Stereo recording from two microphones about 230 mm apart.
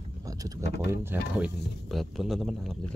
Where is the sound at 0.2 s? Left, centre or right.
Centre.